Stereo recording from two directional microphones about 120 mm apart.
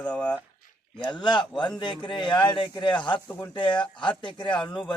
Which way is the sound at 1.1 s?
40° left (ahead or behind).